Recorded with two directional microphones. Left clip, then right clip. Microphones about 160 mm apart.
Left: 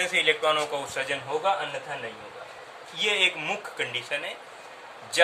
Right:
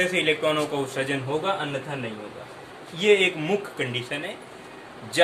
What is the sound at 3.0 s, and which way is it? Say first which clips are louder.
A man's voice: right 4 dB; 15° left (ahead or behind).